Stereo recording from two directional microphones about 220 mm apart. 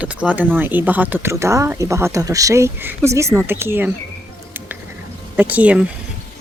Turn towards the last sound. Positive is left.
turn(degrees=-5)  # may be behind; listen again after turning